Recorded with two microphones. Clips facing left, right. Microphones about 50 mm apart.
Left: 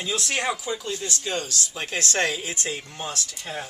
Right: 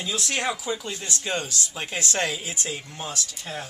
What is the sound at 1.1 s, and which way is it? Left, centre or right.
Speech, right.